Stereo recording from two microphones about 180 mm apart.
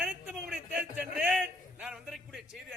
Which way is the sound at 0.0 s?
5° right (ahead or behind).